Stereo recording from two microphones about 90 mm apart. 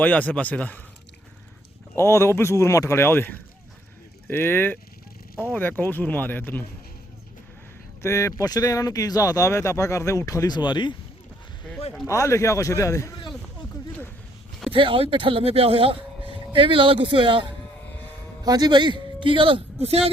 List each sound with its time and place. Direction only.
0.0 s speech: 15° left (ahead or behind)
2.0 s speech: 30° left (ahead or behind)
8.0 s speech: 35° left (ahead or behind)
10.5 s speech: 60° left (ahead or behind)
12.0 s speech: 35° left (ahead or behind)
14.7 s speech: 80° right; by 17.5 s 60° right (ahead or behind)
18.4 s speech: 45° right (ahead or behind); by 20.1 s 70° right (ahead or behind)